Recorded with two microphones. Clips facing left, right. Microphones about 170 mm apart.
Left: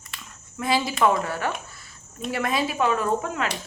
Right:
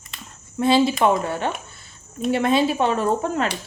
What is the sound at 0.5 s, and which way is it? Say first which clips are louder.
Speech: right 7 dB; 30° right (ahead or behind).